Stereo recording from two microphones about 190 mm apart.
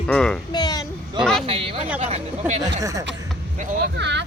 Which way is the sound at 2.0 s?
35° right (ahead or behind).